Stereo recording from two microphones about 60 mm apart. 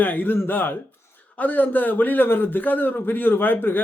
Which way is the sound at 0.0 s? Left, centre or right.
Left.